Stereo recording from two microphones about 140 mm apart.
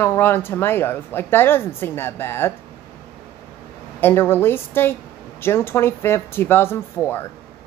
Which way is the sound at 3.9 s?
15° left (ahead or behind).